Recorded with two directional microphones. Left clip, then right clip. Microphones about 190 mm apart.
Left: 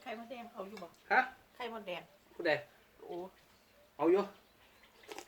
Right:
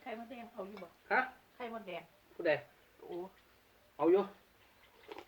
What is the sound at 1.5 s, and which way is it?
Speech, 55° left (ahead or behind).